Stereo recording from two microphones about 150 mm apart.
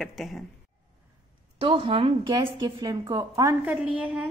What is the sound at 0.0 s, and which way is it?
Speech, centre (ahead or behind).